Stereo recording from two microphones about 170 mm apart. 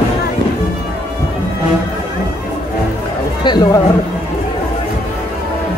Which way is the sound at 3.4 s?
25° left (ahead or behind).